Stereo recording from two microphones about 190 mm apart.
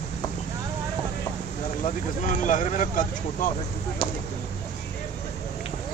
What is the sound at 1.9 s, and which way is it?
Speech, 40° left (ahead or behind).